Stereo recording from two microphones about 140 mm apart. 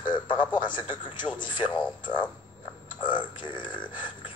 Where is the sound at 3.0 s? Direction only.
35° left (ahead or behind).